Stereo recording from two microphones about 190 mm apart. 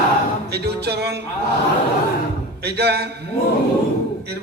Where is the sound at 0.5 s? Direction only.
60° right (ahead or behind).